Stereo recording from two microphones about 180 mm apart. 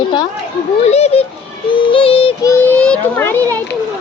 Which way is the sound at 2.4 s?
15° left (ahead or behind).